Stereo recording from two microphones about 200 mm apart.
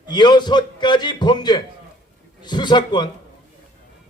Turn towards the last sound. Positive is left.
turn(degrees=20)  # may be behind; listen again after turning